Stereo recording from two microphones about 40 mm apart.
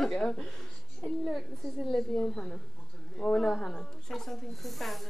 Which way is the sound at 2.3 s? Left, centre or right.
Left.